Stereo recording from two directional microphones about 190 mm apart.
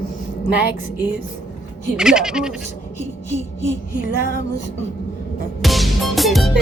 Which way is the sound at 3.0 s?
35° left (ahead or behind).